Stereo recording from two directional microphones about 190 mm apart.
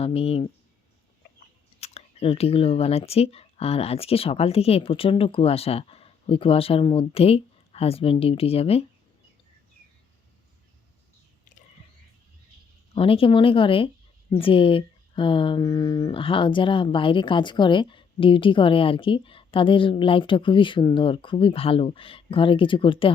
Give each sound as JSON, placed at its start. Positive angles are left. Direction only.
{"t": 0.0, "sound": "speech", "side_deg": 30}
{"t": 1.8, "sound": "speech", "side_deg": 35}
{"t": 12.9, "sound": "speech", "side_deg": 30}